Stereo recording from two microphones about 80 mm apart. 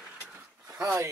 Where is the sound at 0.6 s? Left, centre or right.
Right.